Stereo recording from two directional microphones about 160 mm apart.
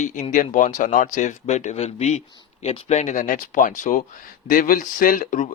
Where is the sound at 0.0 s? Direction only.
50° left (ahead or behind).